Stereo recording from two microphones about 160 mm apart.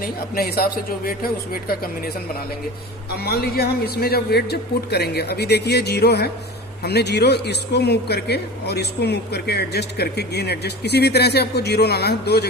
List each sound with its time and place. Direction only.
0.0 s speech: 70° left (ahead or behind)
3.2 s speech: 75° left (ahead or behind)